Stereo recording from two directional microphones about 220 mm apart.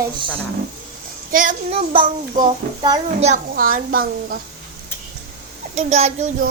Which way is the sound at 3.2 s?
35° right (ahead or behind).